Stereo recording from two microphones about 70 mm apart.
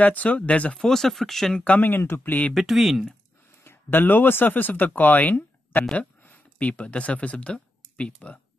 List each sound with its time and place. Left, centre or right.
0.0 s speech: left
0.7 s speech: centre
1.6 s speech: centre
1.9 s speech: left
2.5 s speech: centre
3.6 s speech: left